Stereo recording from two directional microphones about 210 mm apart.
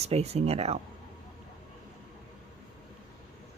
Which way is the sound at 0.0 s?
30° right (ahead or behind).